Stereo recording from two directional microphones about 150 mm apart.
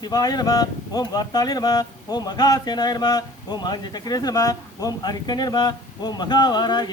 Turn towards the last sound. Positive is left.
turn(degrees=30)  # may be behind; listen again after turning